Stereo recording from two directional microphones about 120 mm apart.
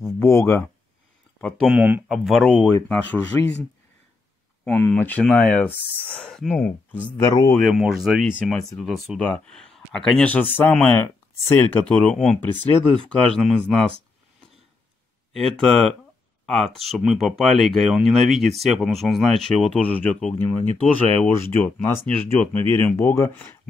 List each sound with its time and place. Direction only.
0.0 s speech: 20° left (ahead or behind)
1.7 s speech: 15° right (ahead or behind)
2.0 s speech: centre (ahead or behind)
4.6 s speech: 15° left (ahead or behind)
7.2 s speech: 30° left (ahead or behind)
7.5 s speech: centre (ahead or behind)
9.2 s speech: 10° left (ahead or behind)
15.3 s speech: 5° left (ahead or behind)
20.3 s speech: 20° left (ahead or behind)
20.8 s speech: 5° left (ahead or behind)